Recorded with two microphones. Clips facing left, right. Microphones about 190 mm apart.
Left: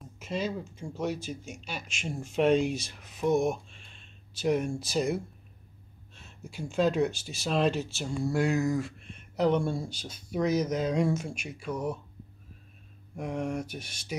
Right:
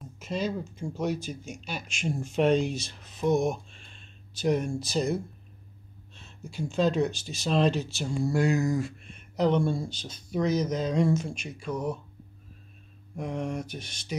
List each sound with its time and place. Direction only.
0.0 s speech: 5° left (ahead or behind)
13.1 s speech: 10° left (ahead or behind)